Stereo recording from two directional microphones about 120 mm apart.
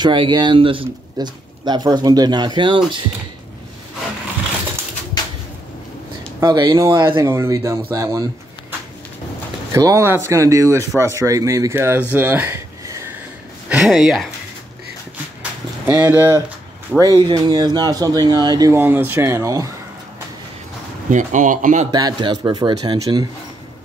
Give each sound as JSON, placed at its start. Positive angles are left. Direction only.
{"t": 0.0, "sound": "speech", "side_deg": -40}
{"t": 1.1, "sound": "speech", "side_deg": -35}
{"t": 6.4, "sound": "speech", "side_deg": -35}
{"t": 9.7, "sound": "speech", "side_deg": -30}
{"t": 13.7, "sound": "speech", "side_deg": -5}
{"t": 15.8, "sound": "speech", "side_deg": -15}
{"t": 17.0, "sound": "speech", "side_deg": -35}
{"t": 18.7, "sound": "speech", "side_deg": -15}
{"t": 21.1, "sound": "speech", "side_deg": -90}
{"t": 21.9, "sound": "speech", "side_deg": -35}